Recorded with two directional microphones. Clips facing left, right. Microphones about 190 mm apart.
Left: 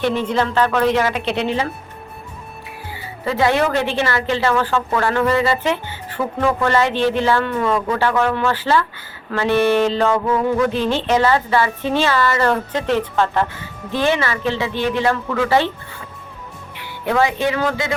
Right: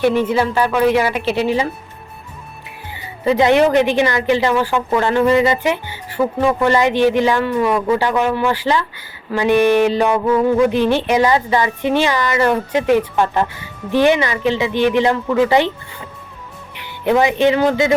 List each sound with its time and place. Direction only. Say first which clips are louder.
0.0 s a woman's voice: right 4 dB; 10° right (ahead or behind)
3.2 s a woman's voice: right 5 dB; 20° right (ahead or behind)
16.7 s speech: right 4 dB; 20° right (ahead or behind)